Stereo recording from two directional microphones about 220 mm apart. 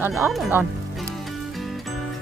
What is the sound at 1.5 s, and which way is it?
Music, centre (ahead or behind).